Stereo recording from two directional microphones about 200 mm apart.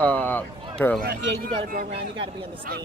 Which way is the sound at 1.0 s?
45° right (ahead or behind).